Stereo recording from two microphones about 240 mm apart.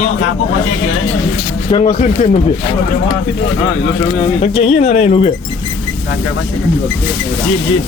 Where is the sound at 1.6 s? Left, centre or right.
Left.